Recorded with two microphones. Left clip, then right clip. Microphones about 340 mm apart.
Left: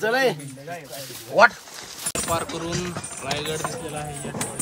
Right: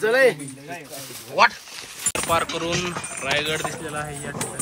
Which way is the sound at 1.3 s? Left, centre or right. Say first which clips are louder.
Left 2 dB; left.